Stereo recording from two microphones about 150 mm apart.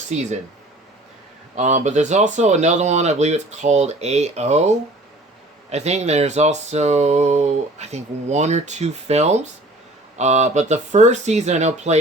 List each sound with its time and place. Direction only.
0.1 s speech: 50° right (ahead or behind)
1.5 s speech: 50° right (ahead or behind)